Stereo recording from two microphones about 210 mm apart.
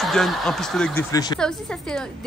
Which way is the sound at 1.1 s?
20° left (ahead or behind).